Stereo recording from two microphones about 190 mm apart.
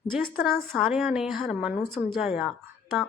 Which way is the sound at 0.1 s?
Centre (ahead or behind).